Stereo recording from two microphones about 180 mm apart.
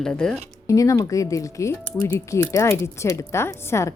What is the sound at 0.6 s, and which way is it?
Speech, 20° left (ahead or behind).